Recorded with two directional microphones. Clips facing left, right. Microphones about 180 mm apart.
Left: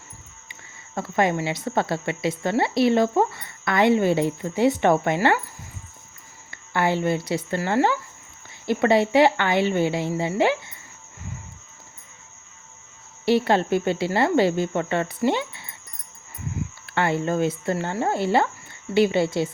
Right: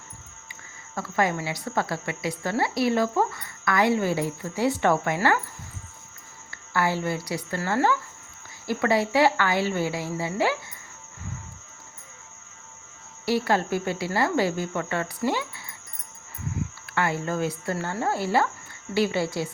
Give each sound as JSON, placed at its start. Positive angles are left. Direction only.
{"t": 0.9, "sound": "a woman's voice", "side_deg": 25}
{"t": 6.7, "sound": "a woman's voice", "side_deg": 20}
{"t": 13.2, "sound": "a woman's voice", "side_deg": 25}
{"t": 16.8, "sound": "a woman's voice", "side_deg": 25}